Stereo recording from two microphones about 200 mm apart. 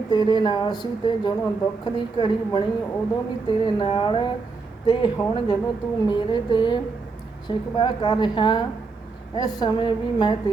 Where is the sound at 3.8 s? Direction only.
25° left (ahead or behind).